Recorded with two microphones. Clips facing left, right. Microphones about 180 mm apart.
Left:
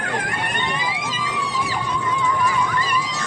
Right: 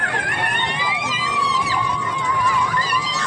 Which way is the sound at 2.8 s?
70° right (ahead or behind).